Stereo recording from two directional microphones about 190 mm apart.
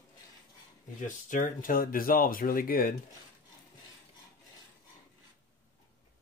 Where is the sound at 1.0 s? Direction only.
40° left (ahead or behind).